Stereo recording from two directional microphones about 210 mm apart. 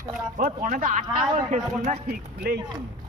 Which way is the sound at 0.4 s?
40° right (ahead or behind).